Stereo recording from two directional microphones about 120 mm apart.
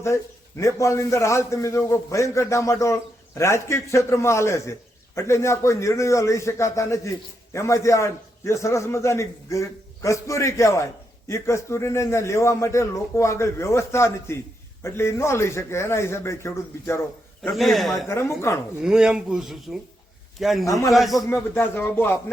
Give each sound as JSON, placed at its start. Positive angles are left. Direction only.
{"t": 0.0, "sound": "a man's voice", "side_deg": 25}
{"t": 17.5, "sound": "speech", "side_deg": 0}
{"t": 17.9, "sound": "a man's voice", "side_deg": 25}
{"t": 18.8, "sound": "speech", "side_deg": -5}
{"t": 20.7, "sound": "a man's voice", "side_deg": 25}
{"t": 20.9, "sound": "speech", "side_deg": 0}
{"t": 21.5, "sound": "speech", "side_deg": 15}